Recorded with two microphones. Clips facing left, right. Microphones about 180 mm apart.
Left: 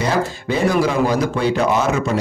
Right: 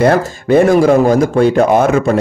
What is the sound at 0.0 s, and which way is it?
Speech, 55° right (ahead or behind).